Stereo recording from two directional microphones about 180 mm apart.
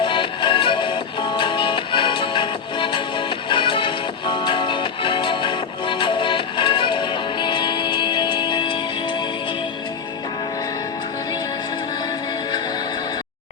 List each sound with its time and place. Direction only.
0.0 s music: 25° left (ahead or behind)